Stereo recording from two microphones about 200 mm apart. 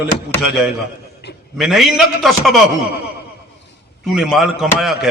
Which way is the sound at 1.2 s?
55° left (ahead or behind).